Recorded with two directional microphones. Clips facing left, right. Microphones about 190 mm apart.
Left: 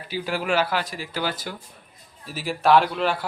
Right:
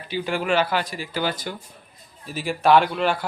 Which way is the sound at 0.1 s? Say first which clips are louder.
Right 2 dB; 5° left (ahead or behind).